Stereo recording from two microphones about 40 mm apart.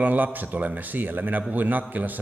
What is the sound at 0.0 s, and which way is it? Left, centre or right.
A man's voice, right.